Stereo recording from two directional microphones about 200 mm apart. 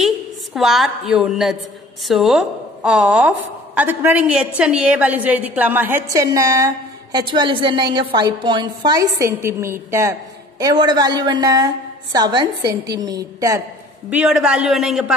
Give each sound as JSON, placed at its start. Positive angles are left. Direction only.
{"t": 0.6, "sound": "a man's voice", "side_deg": 0}
{"t": 14.1, "sound": "a man's voice", "side_deg": -5}